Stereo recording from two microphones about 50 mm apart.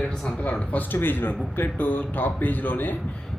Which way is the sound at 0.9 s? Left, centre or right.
Left.